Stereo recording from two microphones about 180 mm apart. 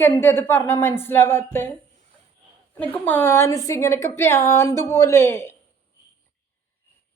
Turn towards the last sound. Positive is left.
turn(degrees=15)  # may be behind; listen again after turning